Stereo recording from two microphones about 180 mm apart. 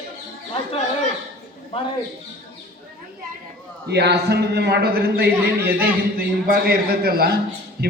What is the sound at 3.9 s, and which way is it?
A man's voice, 65° right (ahead or behind).